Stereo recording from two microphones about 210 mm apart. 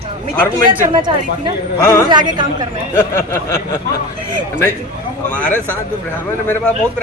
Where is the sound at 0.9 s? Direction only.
20° right (ahead or behind).